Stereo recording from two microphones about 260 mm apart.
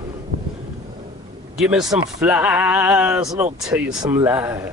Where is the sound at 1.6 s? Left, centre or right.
Centre.